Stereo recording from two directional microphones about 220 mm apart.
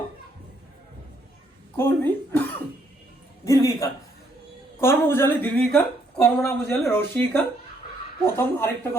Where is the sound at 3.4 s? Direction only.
15° left (ahead or behind).